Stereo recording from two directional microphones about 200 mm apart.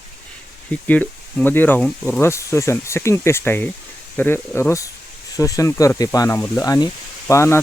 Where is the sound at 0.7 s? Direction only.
10° left (ahead or behind).